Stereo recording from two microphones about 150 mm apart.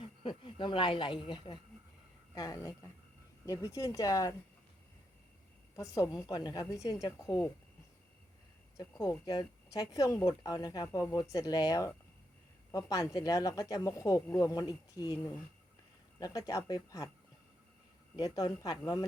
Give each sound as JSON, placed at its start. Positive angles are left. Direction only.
{"t": 0.2, "sound": "speech", "side_deg": 30}
{"t": 5.7, "sound": "speech", "side_deg": 20}
{"t": 8.8, "sound": "speech", "side_deg": 20}
{"t": 16.2, "sound": "speech", "side_deg": 20}
{"t": 18.2, "sound": "speech", "side_deg": 25}